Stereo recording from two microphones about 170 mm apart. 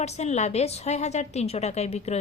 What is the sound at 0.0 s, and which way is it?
A woman's voice, 45° left (ahead or behind).